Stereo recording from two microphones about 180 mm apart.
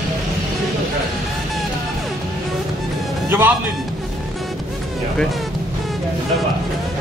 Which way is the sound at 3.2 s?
10° right (ahead or behind).